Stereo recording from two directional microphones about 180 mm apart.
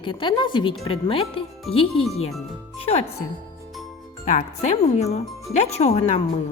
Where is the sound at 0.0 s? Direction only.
25° left (ahead or behind).